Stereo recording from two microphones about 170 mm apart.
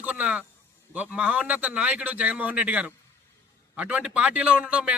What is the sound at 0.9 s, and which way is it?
A man's voice, 5° right (ahead or behind).